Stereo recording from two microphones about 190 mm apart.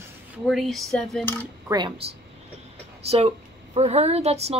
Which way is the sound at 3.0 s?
35° right (ahead or behind).